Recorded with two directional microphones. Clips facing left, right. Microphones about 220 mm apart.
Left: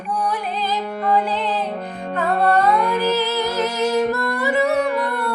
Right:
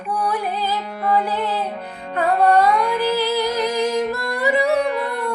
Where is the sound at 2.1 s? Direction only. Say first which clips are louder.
Right 2 dB; 10° right (ahead or behind).